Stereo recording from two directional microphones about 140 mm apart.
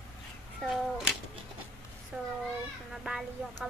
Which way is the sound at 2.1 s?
10° right (ahead or behind).